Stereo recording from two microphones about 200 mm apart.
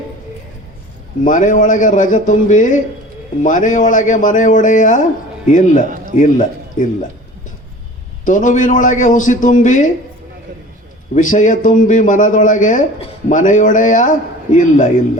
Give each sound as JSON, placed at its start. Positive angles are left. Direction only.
{"t": 1.2, "sound": "a man's voice", "side_deg": 40}
{"t": 8.2, "sound": "a man's voice", "side_deg": 40}
{"t": 11.1, "sound": "a man's voice", "side_deg": 40}